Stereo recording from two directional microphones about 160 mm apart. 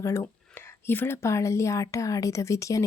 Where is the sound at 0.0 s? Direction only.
15° left (ahead or behind).